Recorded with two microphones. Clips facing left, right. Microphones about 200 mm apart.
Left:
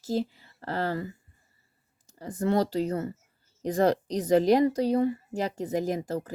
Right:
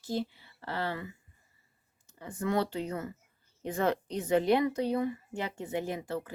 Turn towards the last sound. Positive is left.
turn(degrees=40)  # may be behind; listen again after turning